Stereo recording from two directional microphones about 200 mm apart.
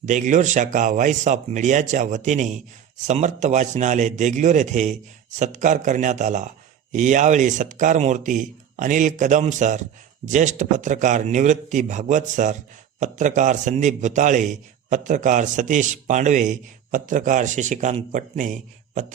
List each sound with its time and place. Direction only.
0.0 s a man's voice: 40° right (ahead or behind)